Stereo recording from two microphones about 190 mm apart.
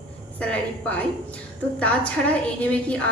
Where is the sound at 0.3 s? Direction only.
5° left (ahead or behind).